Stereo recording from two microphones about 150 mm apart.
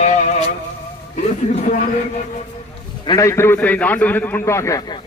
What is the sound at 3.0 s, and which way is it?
A man's voice, 25° left (ahead or behind).